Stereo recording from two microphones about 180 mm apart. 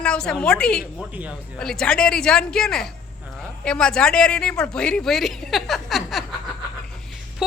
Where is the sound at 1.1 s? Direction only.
10° right (ahead or behind).